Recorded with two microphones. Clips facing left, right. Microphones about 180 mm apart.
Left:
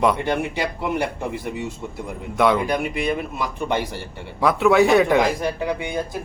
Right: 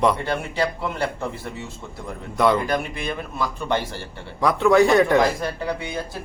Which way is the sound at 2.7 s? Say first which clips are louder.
Left 3 dB; 15° left (ahead or behind).